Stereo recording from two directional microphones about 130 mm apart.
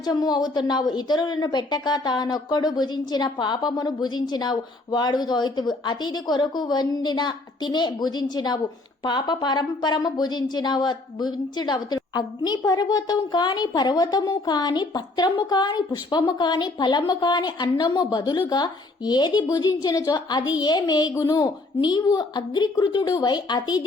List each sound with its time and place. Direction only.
0.0 s a woman's voice: 30° left (ahead or behind)